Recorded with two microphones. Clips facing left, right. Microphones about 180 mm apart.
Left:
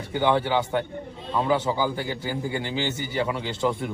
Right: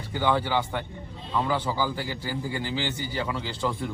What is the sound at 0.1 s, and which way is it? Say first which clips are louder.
A man's voice: left 3 dB; 25° left (ahead or behind).